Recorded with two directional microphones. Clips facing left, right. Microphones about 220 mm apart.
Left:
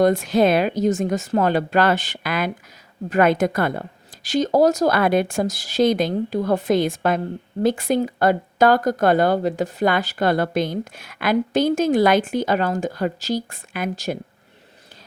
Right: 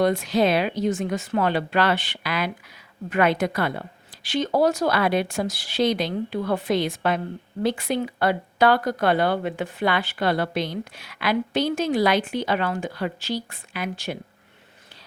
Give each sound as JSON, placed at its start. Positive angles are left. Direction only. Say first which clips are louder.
{"t": 0.0, "sound": "speech", "louder": "left 4 dB", "side_deg": 50}